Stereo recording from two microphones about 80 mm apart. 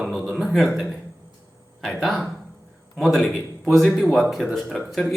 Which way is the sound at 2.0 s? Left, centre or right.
Centre.